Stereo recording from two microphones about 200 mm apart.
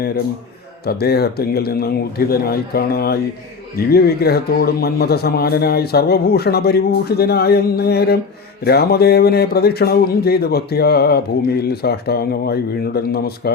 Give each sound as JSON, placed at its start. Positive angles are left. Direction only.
{"t": 0.9, "sound": "speech", "side_deg": 50}